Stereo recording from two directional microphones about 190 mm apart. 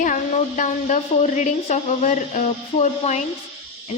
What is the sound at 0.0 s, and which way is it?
A woman's voice, 40° left (ahead or behind).